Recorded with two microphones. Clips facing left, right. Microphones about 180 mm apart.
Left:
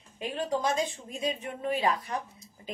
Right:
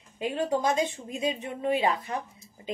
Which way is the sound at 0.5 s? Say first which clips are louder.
Right 1 dB; 25° right (ahead or behind).